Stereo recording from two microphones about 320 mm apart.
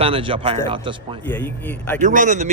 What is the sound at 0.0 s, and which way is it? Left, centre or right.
Speech, centre.